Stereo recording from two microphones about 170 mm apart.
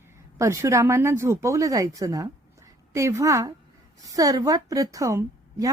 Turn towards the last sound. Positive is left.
turn(degrees=-20)  # may be behind; listen again after turning